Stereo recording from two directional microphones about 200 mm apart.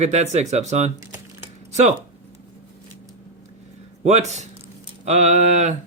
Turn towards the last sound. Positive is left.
turn(degrees=-35)  # may be behind; listen again after turning